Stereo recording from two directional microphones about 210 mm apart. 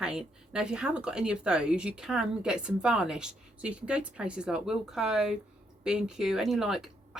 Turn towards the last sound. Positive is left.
turn(degrees=0)  # may be behind; listen again after turning